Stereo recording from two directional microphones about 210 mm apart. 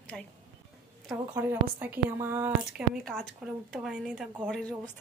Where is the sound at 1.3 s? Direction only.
10° right (ahead or behind).